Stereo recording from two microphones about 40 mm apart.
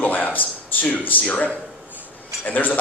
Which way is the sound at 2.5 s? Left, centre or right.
Left.